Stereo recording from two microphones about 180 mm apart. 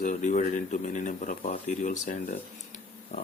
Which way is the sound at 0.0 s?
45° left (ahead or behind).